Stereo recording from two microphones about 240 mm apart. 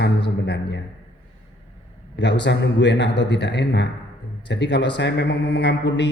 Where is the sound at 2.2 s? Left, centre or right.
Left.